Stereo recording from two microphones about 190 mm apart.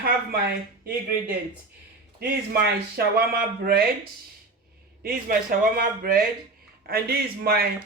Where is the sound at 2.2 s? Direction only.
55° right (ahead or behind).